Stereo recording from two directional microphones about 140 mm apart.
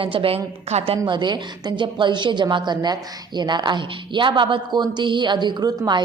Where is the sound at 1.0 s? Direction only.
30° right (ahead or behind).